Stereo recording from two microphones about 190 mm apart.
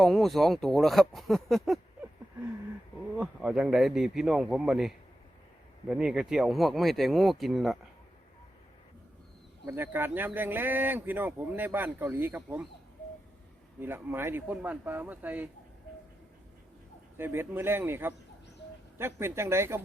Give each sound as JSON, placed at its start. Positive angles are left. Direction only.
{"t": 0.0, "sound": "speech", "side_deg": 0}
{"t": 3.2, "sound": "speech", "side_deg": -5}
{"t": 9.6, "sound": "speech", "side_deg": -10}
{"t": 13.7, "sound": "speech", "side_deg": -10}
{"t": 17.2, "sound": "speech", "side_deg": -10}